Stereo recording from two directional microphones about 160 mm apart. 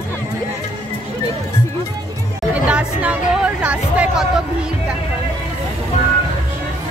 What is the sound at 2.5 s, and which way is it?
Chatter, 5° right (ahead or behind).